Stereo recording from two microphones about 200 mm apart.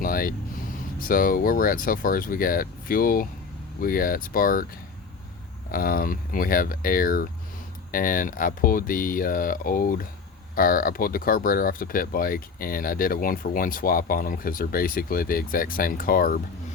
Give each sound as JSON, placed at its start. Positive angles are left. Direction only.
{"t": 0.0, "sound": "vehicle", "side_deg": 45}
{"t": 0.9, "sound": "speech", "side_deg": 45}
{"t": 5.7, "sound": "speech", "side_deg": 45}